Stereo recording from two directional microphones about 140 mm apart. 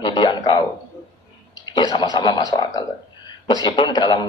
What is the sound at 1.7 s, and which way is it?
A man's voice, 30° left (ahead or behind).